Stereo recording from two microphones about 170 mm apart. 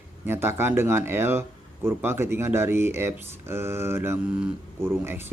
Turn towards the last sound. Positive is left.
turn(degrees=-15)  # may be behind; listen again after turning